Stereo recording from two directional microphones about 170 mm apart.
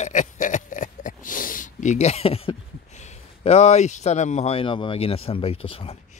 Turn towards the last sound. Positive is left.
turn(degrees=35)  # may be behind; listen again after turning